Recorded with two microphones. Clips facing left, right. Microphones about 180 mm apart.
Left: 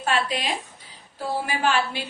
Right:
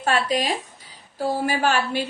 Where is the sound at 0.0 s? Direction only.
40° right (ahead or behind).